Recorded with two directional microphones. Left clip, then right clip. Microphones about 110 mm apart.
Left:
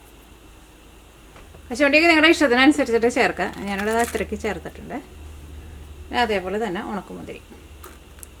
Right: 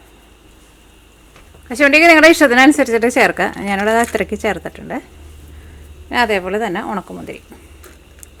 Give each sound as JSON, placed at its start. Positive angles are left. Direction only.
{"t": 1.7, "sound": "a woman's voice", "side_deg": -40}
{"t": 6.1, "sound": "a woman's voice", "side_deg": -40}